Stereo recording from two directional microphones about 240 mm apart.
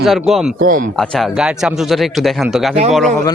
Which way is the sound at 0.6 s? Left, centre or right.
Right.